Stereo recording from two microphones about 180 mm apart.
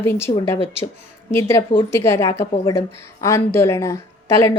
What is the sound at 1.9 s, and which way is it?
A woman's voice, 15° left (ahead or behind).